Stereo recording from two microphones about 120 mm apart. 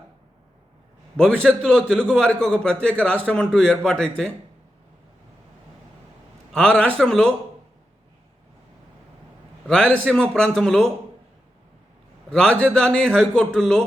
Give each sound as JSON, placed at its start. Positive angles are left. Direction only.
{"t": 1.1, "sound": "a man's voice", "side_deg": 10}
{"t": 6.5, "sound": "a man's voice", "side_deg": 10}
{"t": 9.6, "sound": "a man's voice", "side_deg": 10}
{"t": 12.3, "sound": "a man's voice", "side_deg": 5}